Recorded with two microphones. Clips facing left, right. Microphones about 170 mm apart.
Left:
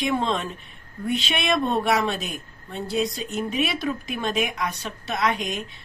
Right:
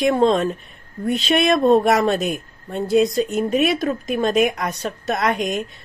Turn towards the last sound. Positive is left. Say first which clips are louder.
# right 5 dB
turn(degrees=-45)  # may be behind; listen again after turning